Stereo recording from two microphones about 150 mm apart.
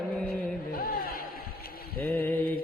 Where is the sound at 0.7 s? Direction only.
80° left.